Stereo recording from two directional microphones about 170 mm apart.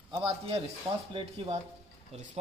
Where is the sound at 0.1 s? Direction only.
30° right (ahead or behind).